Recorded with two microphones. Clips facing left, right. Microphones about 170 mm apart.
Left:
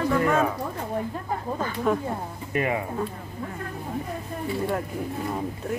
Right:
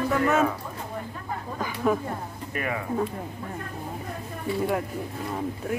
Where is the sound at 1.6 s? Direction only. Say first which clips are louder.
Right 1 dB; 5° right (ahead or behind).